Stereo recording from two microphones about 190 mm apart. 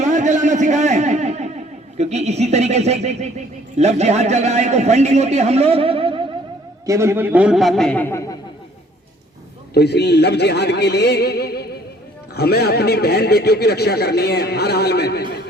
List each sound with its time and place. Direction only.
0.0 s a sound: 40° right (ahead or behind)
2.0 s speech: 35° right (ahead or behind)
6.8 s a man's voice: 15° right (ahead or behind); by 8.4 s 15° left (ahead or behind)
9.7 s speech: 60° left (ahead or behind)